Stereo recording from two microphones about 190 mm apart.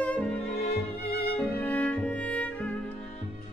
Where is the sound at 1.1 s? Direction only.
55° left (ahead or behind).